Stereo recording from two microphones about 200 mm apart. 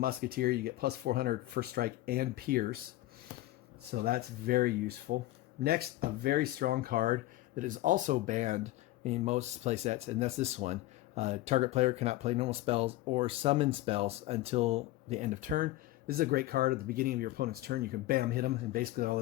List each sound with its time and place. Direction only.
0.0 s speech: 50° right (ahead or behind)
3.9 s speech: 50° right (ahead or behind)